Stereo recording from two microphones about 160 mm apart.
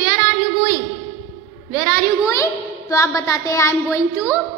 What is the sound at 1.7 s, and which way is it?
A woman's voice, 20° left (ahead or behind).